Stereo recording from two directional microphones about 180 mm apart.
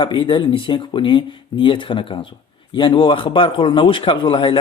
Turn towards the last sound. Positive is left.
turn(degrees=30)  # may be behind; listen again after turning